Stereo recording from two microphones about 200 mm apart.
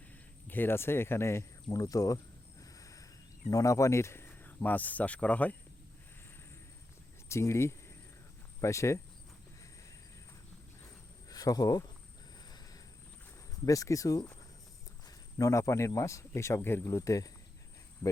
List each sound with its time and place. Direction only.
0.1 s speech: 10° left (ahead or behind)
1.7 s a sound: 15° left (ahead or behind)
3.5 s speech: 15° left (ahead or behind)
7.3 s speech: 15° left (ahead or behind)
11.3 s speech: 20° left (ahead or behind)
12.5 s vehicle: 20° left (ahead or behind)
13.7 s speech: 15° left (ahead or behind)